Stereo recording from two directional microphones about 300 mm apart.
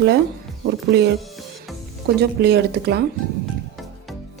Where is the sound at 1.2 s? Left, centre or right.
Centre.